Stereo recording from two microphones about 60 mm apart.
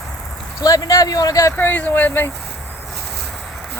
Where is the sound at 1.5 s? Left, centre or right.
Left.